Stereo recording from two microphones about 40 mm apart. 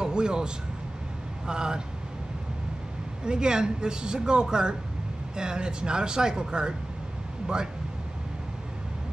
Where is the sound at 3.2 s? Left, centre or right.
Centre.